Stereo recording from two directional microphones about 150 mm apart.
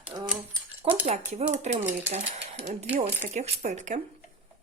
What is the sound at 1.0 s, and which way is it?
Speech, 45° right (ahead or behind).